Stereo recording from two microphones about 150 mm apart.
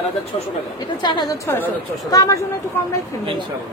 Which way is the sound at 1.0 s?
30° left (ahead or behind).